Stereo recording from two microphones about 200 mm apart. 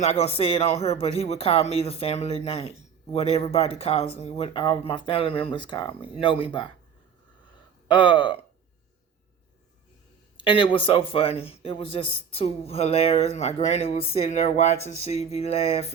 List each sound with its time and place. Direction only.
0.0 s speech: 30° left (ahead or behind)
7.9 s speech: 25° left (ahead or behind)
10.3 s speech: 25° left (ahead or behind)